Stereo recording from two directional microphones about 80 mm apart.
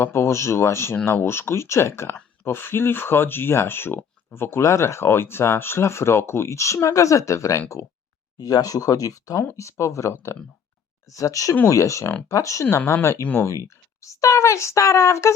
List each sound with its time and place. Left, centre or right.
0.0 s speech: left
8.4 s speech: left
9.6 s speech: left
13.2 s speech: left
13.5 s speech: left